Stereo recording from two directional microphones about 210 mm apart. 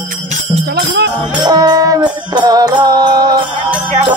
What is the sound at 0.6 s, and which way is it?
Music, 50° right (ahead or behind).